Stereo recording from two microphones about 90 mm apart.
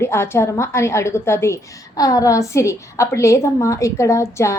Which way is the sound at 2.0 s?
40° left (ahead or behind).